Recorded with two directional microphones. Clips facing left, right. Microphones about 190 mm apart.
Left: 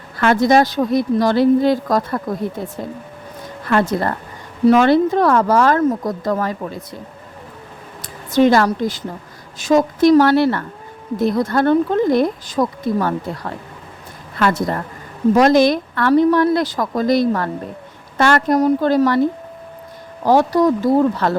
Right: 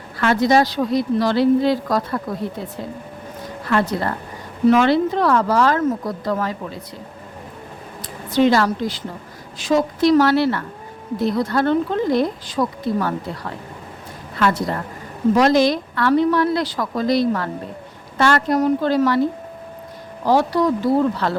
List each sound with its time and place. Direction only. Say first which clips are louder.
0.2 s speech: left 2 dB; 50° left (ahead or behind)
3.7 s speech: left 3 dB; 50° left (ahead or behind)
8.3 s speech: left 3 dB; 50° left (ahead or behind)
14.3 s speech: left 2 dB; 45° left (ahead or behind)
20.2 s speech: left 3 dB; 45° left (ahead or behind)